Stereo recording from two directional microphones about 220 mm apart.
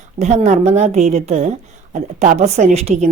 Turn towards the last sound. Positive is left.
turn(degrees=-30)  # may be behind; listen again after turning